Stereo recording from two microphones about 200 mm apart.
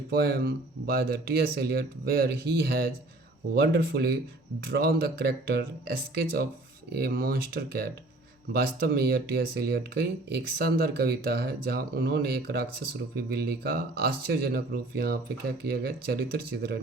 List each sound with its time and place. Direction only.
0.1 s speech: 50° right (ahead or behind)
6.9 s speech: 50° right (ahead or behind)